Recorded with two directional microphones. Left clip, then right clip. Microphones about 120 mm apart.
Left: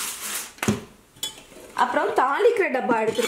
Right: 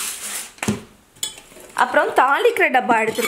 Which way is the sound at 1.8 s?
25° right (ahead or behind).